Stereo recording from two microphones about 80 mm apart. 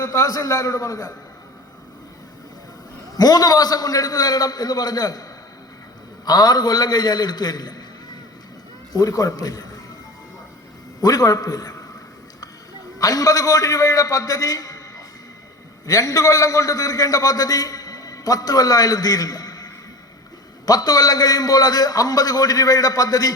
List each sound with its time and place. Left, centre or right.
0.0 s a man's voice: left
3.2 s a man's voice: left
6.2 s a man's voice: left
8.9 s a man's voice: left
11.0 s a man's voice: left
13.0 s a man's voice: left